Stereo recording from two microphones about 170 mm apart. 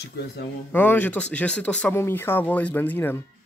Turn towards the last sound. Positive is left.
turn(degrees=10)  # may be behind; listen again after turning